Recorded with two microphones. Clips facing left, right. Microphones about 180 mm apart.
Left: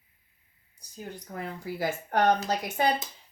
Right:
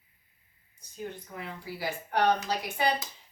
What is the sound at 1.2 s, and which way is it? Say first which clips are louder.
Speech: left 4 dB; 45° left (ahead or behind).